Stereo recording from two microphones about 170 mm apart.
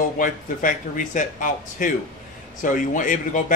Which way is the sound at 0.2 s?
50° left (ahead or behind).